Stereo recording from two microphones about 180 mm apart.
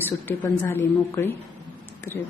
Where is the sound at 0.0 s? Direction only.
10° left (ahead or behind).